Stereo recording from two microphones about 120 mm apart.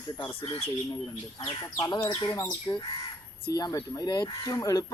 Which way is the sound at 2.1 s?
35° left (ahead or behind).